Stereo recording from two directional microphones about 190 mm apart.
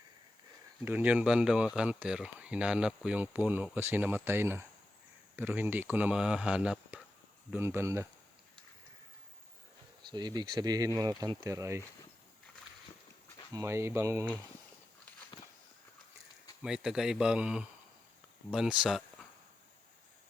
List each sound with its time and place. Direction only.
0.9 s speech: 10° right (ahead or behind)
10.1 s speech: 20° right (ahead or behind)
13.5 s speech: 15° right (ahead or behind)
16.6 s a man's voice: 5° right (ahead or behind)